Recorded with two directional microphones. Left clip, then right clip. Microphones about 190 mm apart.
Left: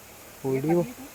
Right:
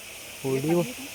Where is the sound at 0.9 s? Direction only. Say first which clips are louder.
Right 5 dB; 45° left (ahead or behind).